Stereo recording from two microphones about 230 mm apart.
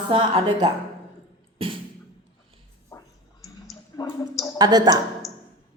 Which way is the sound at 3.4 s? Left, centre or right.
Centre.